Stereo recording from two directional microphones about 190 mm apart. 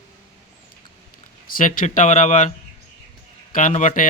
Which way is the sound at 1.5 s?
45° left (ahead or behind).